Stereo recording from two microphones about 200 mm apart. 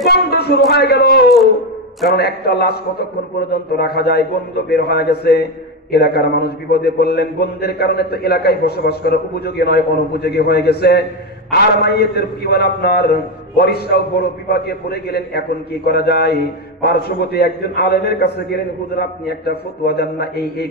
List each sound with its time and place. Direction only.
0.0 s a man's voice: 55° left (ahead or behind)